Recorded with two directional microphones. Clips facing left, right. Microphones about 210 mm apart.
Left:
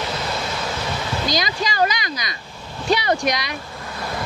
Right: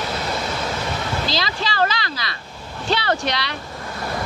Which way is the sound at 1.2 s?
15° left (ahead or behind).